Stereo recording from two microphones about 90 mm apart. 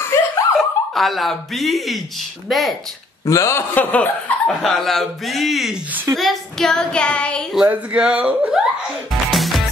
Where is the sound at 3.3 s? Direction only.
35° left (ahead or behind).